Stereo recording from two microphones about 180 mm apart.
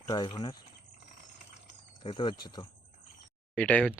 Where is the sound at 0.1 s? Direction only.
25° left (ahead or behind).